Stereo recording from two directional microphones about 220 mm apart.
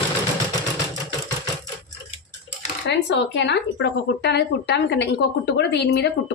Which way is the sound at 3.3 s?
50° left (ahead or behind).